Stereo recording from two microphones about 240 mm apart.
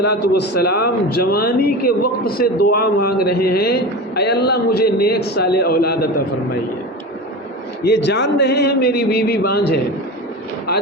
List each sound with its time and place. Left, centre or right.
0.0 s a man's voice: left
7.9 s a man's voice: left